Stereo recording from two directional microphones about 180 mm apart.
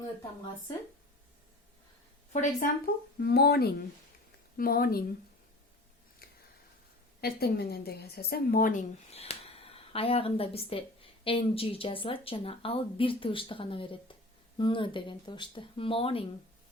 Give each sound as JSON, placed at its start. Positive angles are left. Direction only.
{"t": 2.3, "sound": "a woman's voice", "side_deg": 45}
{"t": 7.2, "sound": "a woman's voice", "side_deg": 60}
{"t": 9.1, "sound": "speech", "side_deg": 35}